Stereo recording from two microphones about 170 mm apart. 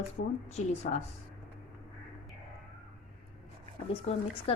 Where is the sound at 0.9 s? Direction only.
50° left (ahead or behind).